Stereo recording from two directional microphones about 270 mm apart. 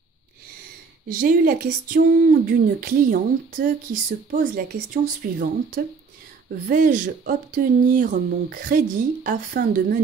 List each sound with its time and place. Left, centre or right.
1.0 s speech: right